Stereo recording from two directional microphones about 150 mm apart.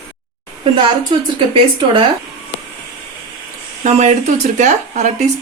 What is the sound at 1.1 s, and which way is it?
Speech, 35° right (ahead or behind).